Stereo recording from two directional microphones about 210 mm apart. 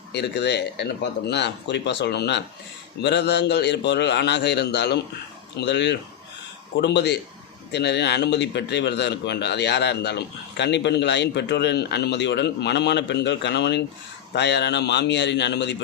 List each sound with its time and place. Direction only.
0.1 s a man's voice: 55° left (ahead or behind)